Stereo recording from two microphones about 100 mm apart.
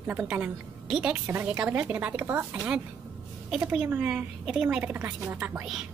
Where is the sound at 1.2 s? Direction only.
20° right (ahead or behind).